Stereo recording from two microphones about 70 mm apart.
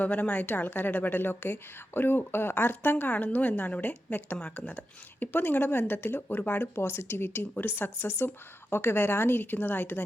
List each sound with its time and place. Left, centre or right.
0.0 s a woman's voice: left